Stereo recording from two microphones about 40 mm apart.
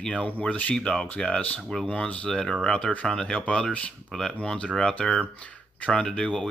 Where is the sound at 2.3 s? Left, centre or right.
Left.